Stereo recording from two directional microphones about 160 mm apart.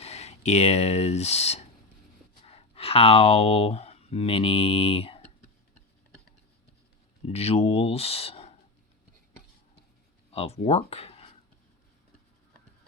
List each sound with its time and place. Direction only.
0.0 s speech: 40° left (ahead or behind)
7.3 s speech: 40° left (ahead or behind)
10.3 s speech: 40° left (ahead or behind)